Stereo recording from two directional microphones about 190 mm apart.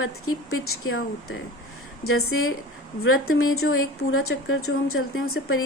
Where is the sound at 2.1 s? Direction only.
90° left.